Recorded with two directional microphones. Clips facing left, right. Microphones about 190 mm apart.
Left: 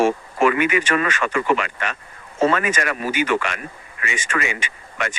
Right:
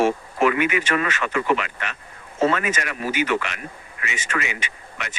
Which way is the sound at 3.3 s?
45° left (ahead or behind).